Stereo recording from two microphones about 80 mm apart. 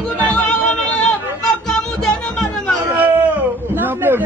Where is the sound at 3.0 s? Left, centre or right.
Right.